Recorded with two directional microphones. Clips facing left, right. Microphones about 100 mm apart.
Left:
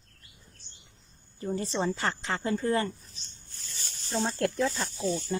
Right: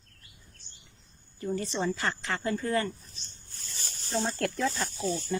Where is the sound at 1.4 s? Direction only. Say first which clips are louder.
Left 1 dB; 30° left (ahead or behind).